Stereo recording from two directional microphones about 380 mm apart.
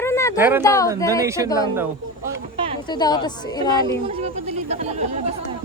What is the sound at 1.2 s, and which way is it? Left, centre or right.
Speech, centre.